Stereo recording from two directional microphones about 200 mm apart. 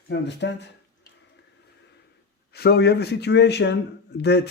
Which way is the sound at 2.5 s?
55° left (ahead or behind).